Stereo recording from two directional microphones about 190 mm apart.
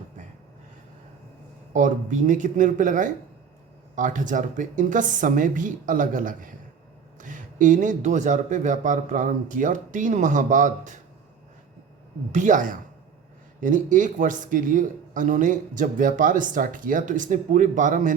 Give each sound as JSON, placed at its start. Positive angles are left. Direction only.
{"t": 1.7, "sound": "a man's voice", "side_deg": -40}
{"t": 12.3, "sound": "speech", "side_deg": -40}